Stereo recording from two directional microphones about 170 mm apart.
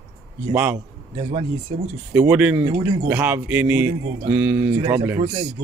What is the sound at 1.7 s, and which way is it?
Speech, 35° right (ahead or behind).